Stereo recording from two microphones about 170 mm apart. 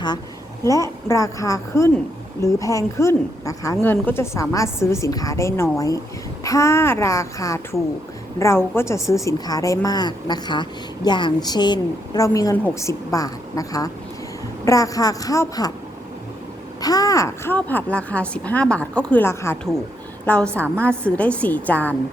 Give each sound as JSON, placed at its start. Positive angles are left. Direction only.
{"t": 0.6, "sound": "a woman's voice", "side_deg": 15}
{"t": 16.8, "sound": "speech", "side_deg": 20}